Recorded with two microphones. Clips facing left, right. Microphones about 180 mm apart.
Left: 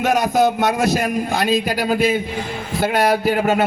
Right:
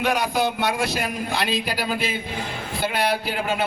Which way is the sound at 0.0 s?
45° left (ahead or behind).